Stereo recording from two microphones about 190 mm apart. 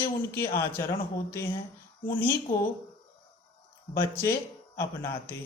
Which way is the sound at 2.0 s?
10° left (ahead or behind).